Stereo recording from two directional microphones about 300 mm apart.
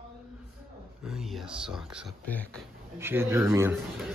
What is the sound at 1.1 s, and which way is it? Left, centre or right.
A man's voice, centre.